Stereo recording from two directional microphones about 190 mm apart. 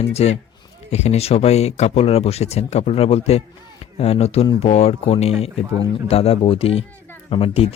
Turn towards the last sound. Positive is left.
turn(degrees=30)  # may be behind; listen again after turning